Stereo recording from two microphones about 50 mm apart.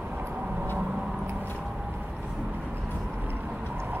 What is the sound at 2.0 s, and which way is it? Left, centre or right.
Vehicle, right.